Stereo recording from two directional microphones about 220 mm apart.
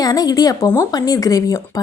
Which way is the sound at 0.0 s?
15° left (ahead or behind).